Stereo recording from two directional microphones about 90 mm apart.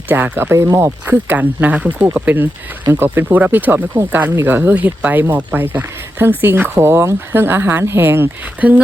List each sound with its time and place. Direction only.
0.1 s speech: 25° right (ahead or behind)
1.1 s speech: 20° right (ahead or behind)